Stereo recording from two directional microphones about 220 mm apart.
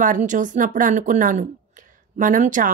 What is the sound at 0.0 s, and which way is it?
A woman's voice, 35° right (ahead or behind).